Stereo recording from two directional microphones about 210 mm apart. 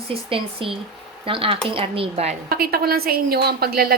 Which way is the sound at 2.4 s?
45° right (ahead or behind).